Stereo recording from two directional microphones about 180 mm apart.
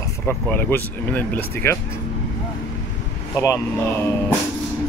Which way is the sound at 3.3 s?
15° left (ahead or behind).